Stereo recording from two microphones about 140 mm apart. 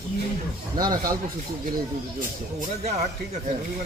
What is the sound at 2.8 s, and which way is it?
Speech, 55° right (ahead or behind).